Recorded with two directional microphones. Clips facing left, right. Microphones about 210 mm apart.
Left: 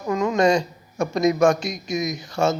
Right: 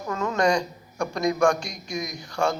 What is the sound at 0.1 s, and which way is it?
A man's voice, 15° left (ahead or behind).